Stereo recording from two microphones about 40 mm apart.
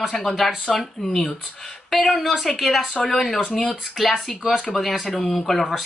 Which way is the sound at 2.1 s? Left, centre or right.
Centre.